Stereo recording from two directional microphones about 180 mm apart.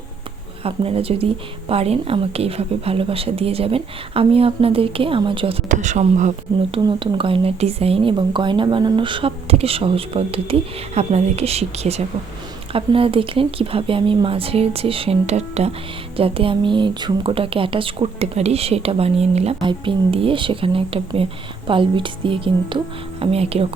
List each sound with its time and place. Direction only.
0.6 s speech: 30° right (ahead or behind)
5.6 s a woman's voice: 40° right (ahead or behind)